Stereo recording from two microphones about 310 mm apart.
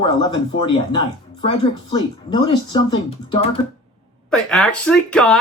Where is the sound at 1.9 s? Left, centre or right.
Centre.